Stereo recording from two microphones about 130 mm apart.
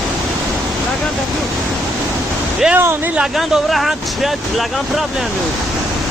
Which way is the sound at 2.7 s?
15° right (ahead or behind).